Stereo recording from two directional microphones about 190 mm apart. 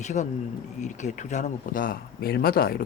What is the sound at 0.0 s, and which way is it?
A man's voice, 40° left (ahead or behind).